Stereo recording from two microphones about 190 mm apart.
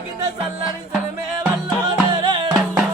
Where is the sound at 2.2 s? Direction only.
25° right (ahead or behind).